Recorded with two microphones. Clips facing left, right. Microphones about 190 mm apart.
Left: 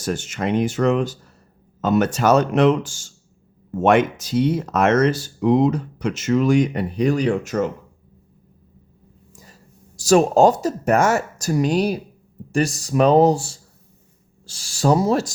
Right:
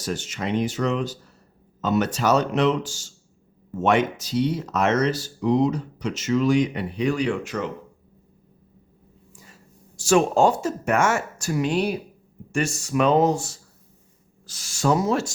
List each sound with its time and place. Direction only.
0.0 s speech: 50° left (ahead or behind)
9.3 s speech: 40° left (ahead or behind)